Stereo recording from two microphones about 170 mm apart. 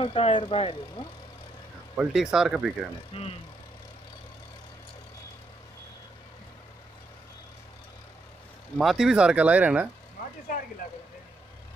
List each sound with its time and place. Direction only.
0.0 s speech: 35° left (ahead or behind)
2.0 s speech: 5° right (ahead or behind)
3.1 s speech: 35° left (ahead or behind)
8.7 s speech: centre (ahead or behind)
10.5 s speech: 55° left (ahead or behind)